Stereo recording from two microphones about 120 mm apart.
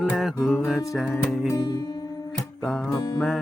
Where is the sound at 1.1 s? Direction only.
25° left (ahead or behind).